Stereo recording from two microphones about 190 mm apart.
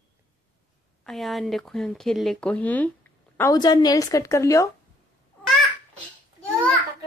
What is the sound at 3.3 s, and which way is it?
A woman's voice, 20° left (ahead or behind).